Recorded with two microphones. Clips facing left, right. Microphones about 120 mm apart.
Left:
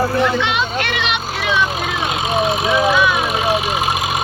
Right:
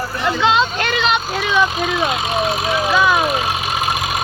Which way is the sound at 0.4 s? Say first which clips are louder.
Right 4 dB; 30° right (ahead or behind).